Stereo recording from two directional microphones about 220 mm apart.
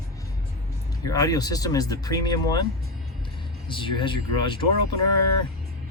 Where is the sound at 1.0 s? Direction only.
15° left (ahead or behind).